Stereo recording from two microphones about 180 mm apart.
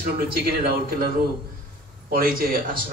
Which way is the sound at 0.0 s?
55° right (ahead or behind).